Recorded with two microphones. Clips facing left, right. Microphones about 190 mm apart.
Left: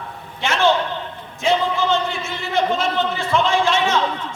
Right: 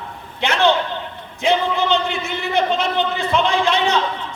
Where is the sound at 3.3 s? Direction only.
20° right (ahead or behind).